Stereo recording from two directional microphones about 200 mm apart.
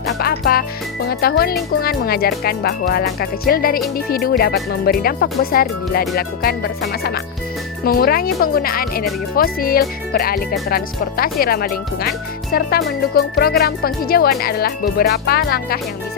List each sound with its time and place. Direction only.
0.1 s music: 50° left (ahead or behind)
1.0 s speech: 50° left (ahead or behind)